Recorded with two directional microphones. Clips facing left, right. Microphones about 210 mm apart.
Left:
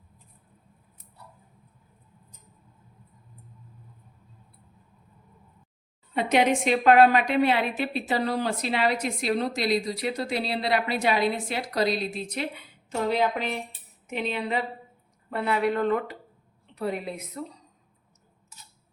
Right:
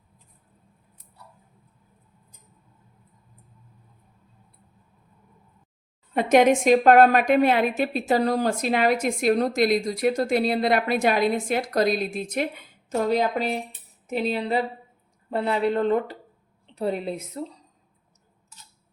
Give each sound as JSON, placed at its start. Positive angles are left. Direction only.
{"t": 6.1, "sound": "a woman's voice", "side_deg": -45}